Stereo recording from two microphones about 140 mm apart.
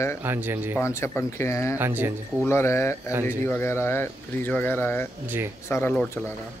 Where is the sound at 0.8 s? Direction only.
20° left (ahead or behind).